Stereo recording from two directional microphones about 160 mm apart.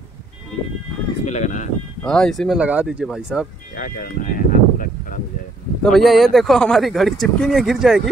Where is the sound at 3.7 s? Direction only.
60° left (ahead or behind).